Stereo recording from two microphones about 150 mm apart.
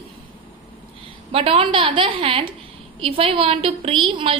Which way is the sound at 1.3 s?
40° right (ahead or behind).